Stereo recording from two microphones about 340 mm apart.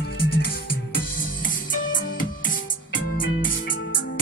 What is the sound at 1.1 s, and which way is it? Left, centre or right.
Music, left.